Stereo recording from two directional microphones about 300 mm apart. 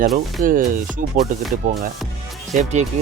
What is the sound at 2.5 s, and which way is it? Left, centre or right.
Speech, right.